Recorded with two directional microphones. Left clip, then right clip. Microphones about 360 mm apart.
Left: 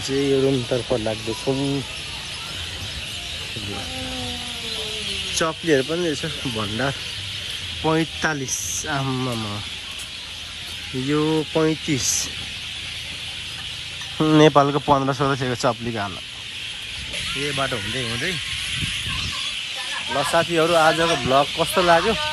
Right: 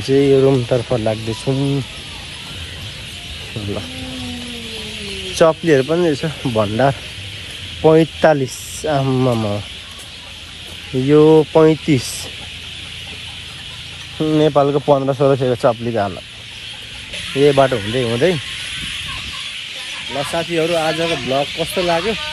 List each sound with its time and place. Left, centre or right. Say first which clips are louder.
0.2 s speech: right 6 dB; right
5.5 s speech: right 6 dB; right
7.8 s speech: right 11 dB; centre
9.2 s speech: right 9 dB; right
11.1 s speech: right 12 dB; right
14.1 s speech: right 1 dB; centre
17.6 s speech: right 9 dB; centre
20.1 s speech: left 1 dB; centre